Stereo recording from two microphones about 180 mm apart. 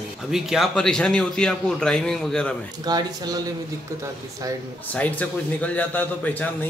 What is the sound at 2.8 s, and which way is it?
Speech, 20° right (ahead or behind).